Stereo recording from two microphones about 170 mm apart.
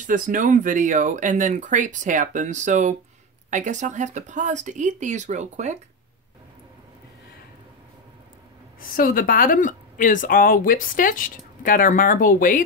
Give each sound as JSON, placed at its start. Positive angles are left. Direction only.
{"t": 0.0, "sound": "speech", "side_deg": -50}
{"t": 8.8, "sound": "speech", "side_deg": 55}